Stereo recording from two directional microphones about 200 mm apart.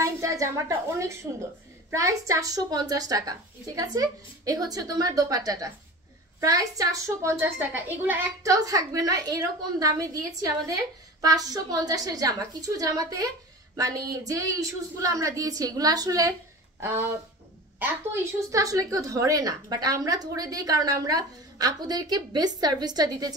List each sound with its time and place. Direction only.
0.0 s a woman's voice: 15° right (ahead or behind)